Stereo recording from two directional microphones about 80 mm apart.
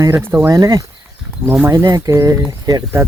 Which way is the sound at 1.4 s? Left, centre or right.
Right.